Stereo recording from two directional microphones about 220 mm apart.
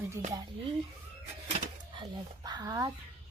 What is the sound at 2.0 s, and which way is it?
Speech, 20° right (ahead or behind).